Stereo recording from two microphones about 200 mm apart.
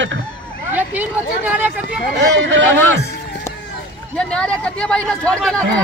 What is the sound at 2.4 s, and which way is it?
Speech, 65° right (ahead or behind).